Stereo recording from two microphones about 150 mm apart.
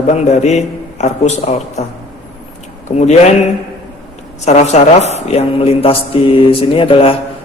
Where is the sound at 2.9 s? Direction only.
50° left (ahead or behind).